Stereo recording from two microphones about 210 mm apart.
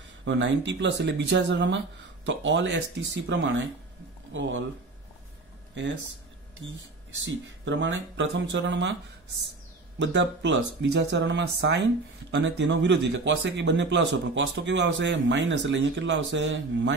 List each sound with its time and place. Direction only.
0.2 s speech: 60° right (ahead or behind)
7.2 s speech: 60° right (ahead or behind)
9.9 s speech: 55° right (ahead or behind)